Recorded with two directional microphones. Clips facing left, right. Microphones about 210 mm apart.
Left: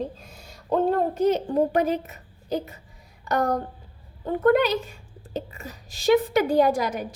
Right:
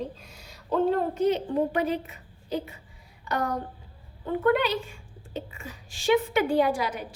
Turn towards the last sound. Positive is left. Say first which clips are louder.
# left 4 dB
turn(degrees=45)  # may be behind; listen again after turning